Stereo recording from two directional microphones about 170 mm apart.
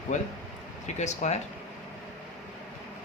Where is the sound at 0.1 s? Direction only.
45° left (ahead or behind).